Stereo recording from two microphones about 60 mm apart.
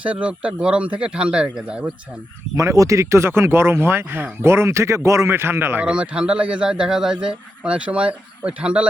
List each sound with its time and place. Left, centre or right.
0.0 s a man's voice: right
2.6 s speech: right
5.3 s a man's voice: right
5.8 s a man's voice: centre